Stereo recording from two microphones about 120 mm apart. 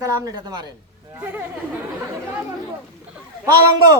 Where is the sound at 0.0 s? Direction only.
30° right (ahead or behind).